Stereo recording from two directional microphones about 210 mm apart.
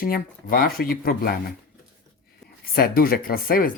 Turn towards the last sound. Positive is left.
turn(degrees=45)  # may be behind; listen again after turning